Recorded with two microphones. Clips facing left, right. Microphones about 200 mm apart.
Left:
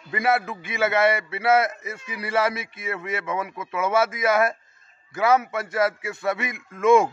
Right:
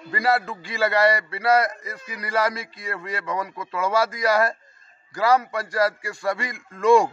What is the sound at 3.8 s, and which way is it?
Speech, 20° left (ahead or behind).